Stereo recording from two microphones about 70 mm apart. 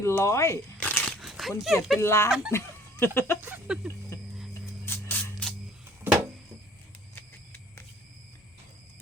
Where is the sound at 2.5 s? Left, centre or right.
Left.